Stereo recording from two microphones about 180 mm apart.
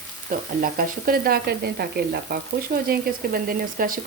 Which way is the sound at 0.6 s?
55° right (ahead or behind).